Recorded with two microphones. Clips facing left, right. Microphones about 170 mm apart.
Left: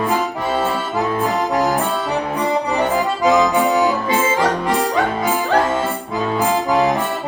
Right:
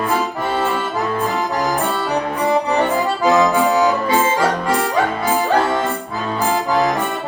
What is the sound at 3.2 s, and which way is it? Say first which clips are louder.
Accordion: even; 20° left (ahead or behind).